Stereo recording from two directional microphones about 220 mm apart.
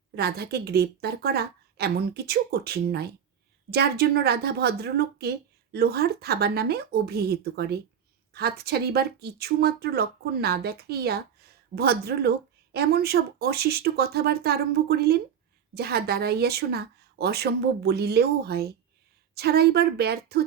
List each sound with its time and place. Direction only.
0.2 s speech: 45° right (ahead or behind)